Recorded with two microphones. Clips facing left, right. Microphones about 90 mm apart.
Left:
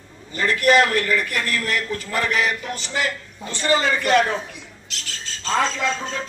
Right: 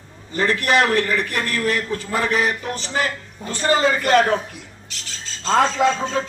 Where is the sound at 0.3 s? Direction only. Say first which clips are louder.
Left 1 dB; 35° right (ahead or behind).